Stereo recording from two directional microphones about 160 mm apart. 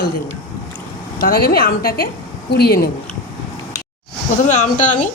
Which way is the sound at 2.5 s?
85° left.